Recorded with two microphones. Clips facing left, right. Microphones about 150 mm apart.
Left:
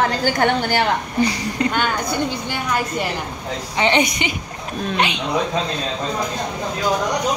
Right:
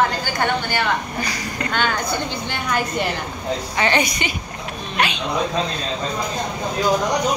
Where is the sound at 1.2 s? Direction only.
25° left (ahead or behind).